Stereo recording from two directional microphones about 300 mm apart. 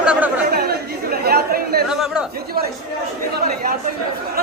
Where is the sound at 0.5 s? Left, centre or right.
Right.